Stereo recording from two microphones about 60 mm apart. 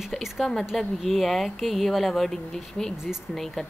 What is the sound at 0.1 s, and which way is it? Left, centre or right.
Speech, centre.